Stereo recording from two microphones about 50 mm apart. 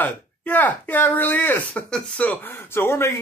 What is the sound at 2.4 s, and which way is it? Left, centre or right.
Speech, left.